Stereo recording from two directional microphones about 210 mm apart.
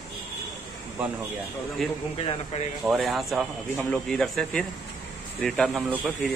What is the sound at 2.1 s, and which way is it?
Speech, 25° left (ahead or behind).